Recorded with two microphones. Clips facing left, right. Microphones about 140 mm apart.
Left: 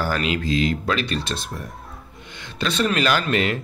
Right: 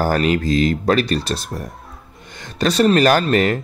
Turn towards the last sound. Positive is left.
turn(degrees=-40)  # may be behind; listen again after turning